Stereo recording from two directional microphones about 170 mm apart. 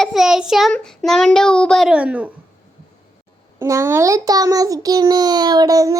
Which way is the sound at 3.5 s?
15° right (ahead or behind).